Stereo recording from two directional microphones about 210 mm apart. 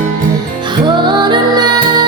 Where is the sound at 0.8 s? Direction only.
20° right (ahead or behind).